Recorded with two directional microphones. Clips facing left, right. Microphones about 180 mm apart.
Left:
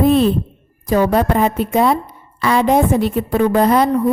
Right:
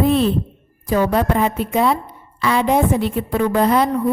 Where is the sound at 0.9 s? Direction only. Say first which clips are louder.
Left 2 dB; 40° left (ahead or behind).